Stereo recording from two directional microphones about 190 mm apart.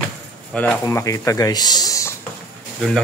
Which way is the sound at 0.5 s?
5° left (ahead or behind).